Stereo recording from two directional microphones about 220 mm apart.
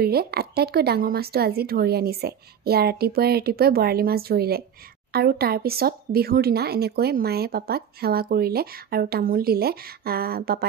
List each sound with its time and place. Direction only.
0.0 s speech: 45° right (ahead or behind)